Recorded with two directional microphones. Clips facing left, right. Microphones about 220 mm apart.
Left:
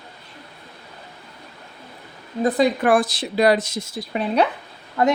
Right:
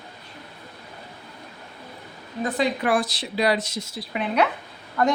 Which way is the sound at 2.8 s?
50° left (ahead or behind).